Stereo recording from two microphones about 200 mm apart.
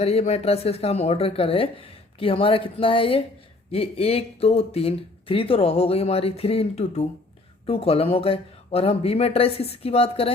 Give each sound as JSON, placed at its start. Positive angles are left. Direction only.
{"t": 0.0, "sound": "speech", "side_deg": 30}